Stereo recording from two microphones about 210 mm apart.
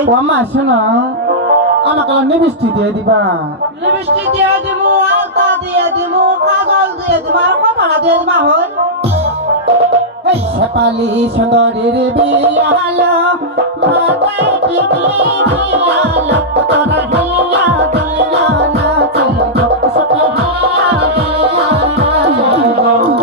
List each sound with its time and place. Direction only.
0.0 s speech: 55° right (ahead or behind)
5.8 s music: 50° right (ahead or behind)
11.3 s music: 50° right (ahead or behind)
16.6 s music: 55° right (ahead or behind)
21.7 s music: 30° right (ahead or behind)